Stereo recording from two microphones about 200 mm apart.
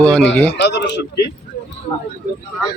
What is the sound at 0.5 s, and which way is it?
Speech, 60° left (ahead or behind).